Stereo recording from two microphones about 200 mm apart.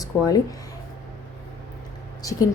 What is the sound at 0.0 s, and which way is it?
Speech, 20° left (ahead or behind).